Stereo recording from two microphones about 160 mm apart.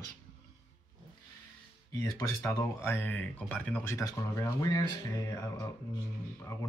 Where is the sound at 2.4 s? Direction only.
15° left (ahead or behind).